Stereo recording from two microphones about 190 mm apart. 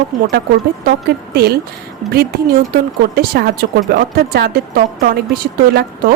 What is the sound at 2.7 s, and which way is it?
A woman's voice, 55° right (ahead or behind).